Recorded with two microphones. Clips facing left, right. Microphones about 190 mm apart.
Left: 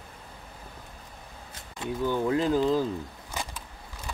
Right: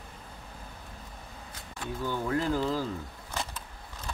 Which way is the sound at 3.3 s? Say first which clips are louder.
Even; 15° left (ahead or behind).